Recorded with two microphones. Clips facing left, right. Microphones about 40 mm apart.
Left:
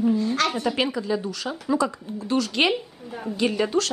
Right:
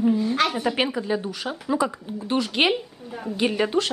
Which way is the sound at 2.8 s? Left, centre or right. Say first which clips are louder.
Even; centre.